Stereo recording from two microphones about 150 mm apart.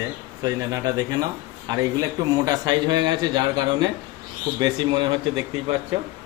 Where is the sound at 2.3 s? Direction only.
25° right (ahead or behind).